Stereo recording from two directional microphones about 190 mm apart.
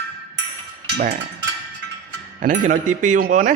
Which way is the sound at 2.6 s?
40° right (ahead or behind).